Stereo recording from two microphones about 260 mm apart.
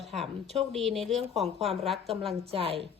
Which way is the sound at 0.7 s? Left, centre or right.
Centre.